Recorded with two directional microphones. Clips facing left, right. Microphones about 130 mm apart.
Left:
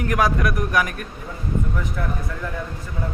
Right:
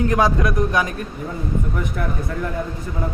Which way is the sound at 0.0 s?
25° right (ahead or behind).